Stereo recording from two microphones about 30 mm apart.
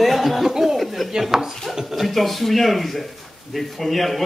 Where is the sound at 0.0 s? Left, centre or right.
Centre.